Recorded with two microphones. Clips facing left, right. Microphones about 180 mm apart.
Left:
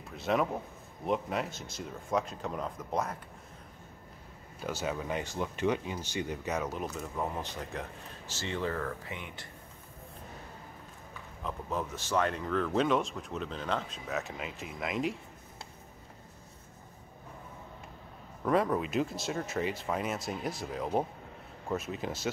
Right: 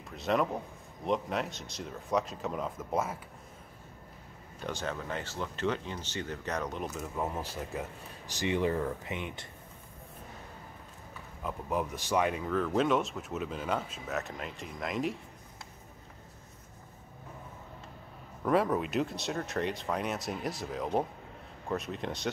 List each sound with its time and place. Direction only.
0.1 s speech: centre (ahead or behind)
4.6 s speech: 5° left (ahead or behind); by 9.5 s 20° right (ahead or behind)
11.4 s speech: 15° right (ahead or behind)
18.4 s speech: centre (ahead or behind)